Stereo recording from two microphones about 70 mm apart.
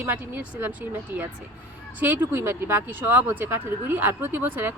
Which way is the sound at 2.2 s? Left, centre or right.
Right.